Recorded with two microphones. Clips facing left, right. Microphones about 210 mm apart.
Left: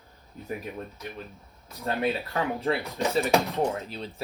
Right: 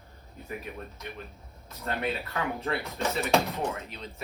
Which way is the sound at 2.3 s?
30° left (ahead or behind).